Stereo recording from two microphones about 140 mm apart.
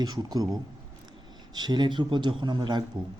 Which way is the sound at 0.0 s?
30° right (ahead or behind).